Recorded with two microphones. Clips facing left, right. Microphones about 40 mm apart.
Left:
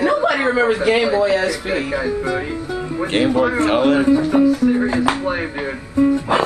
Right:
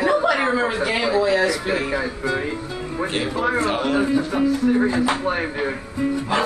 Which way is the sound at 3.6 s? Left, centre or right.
Left.